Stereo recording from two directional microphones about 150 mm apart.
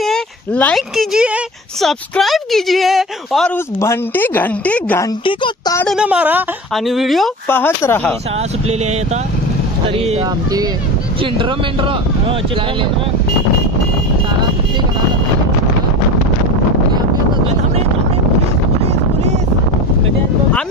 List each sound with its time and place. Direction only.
0.0 s a sound: 5° left (ahead or behind)
0.9 s speech: 5° right (ahead or behind)
3.8 s speech: 15° left (ahead or behind)
5.2 s speech: 35° left (ahead or behind)
5.9 s speech: 5° right (ahead or behind)
7.4 s speech: 15° left (ahead or behind)
9.9 s speech: 45° right (ahead or behind)
11.3 s speech: 35° right (ahead or behind)